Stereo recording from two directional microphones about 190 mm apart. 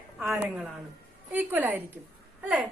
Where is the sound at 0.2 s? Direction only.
Centre (ahead or behind).